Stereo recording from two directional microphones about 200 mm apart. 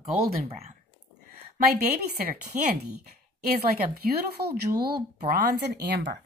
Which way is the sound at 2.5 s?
40° right (ahead or behind).